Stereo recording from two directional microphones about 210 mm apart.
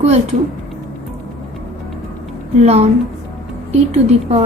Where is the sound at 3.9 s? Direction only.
30° right (ahead or behind).